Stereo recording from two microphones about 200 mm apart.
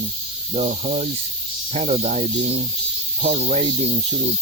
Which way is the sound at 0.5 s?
35° right (ahead or behind).